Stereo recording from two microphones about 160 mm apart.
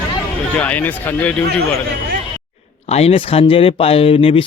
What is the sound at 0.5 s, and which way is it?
Speech, 10° left (ahead or behind).